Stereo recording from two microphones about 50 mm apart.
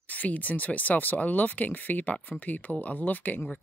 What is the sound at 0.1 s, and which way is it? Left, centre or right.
Speech, left.